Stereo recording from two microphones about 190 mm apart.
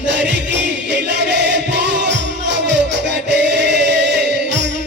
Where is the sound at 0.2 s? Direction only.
65° right (ahead or behind).